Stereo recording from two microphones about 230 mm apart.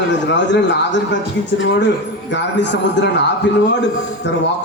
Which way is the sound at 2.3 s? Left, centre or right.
Left.